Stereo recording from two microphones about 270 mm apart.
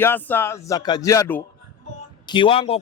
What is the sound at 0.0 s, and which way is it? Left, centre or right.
A man's voice, centre.